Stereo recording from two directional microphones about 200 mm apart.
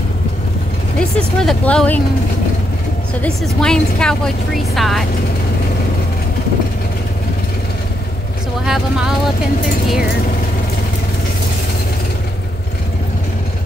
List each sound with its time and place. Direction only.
0.9 s a woman's voice: 5° left (ahead or behind)
3.2 s a woman's voice: 5° left (ahead or behind)
8.6 s a woman's voice: centre (ahead or behind)